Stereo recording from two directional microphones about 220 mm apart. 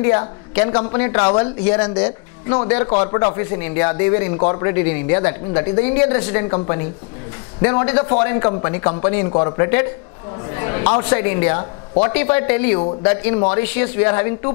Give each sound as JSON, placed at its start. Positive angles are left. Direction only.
{"t": 0.0, "sound": "speech", "side_deg": 20}
{"t": 2.5, "sound": "a woman's voice", "side_deg": 20}
{"t": 13.6, "sound": "speech", "side_deg": 15}